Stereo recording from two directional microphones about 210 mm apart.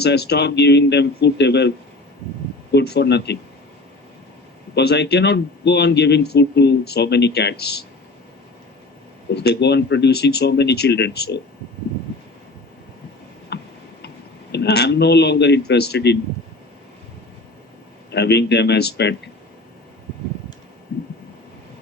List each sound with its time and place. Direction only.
0.0 s speech: 50° left (ahead or behind)
2.7 s speech: 50° left (ahead or behind)
4.7 s speech: 50° left (ahead or behind)
9.3 s speech: 50° left (ahead or behind)
13.5 s tick-tock: 55° left (ahead or behind)
14.5 s speech: 50° left (ahead or behind)
18.1 s speech: 55° left (ahead or behind)